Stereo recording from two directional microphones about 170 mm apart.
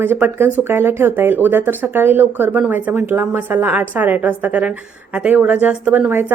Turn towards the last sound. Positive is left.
turn(degrees=-10)  # may be behind; listen again after turning